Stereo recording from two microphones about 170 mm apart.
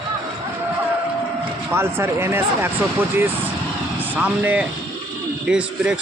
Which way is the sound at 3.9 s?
10° right (ahead or behind).